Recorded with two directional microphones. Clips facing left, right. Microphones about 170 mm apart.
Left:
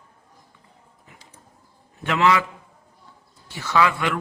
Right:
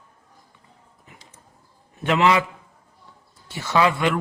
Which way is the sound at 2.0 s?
20° right (ahead or behind).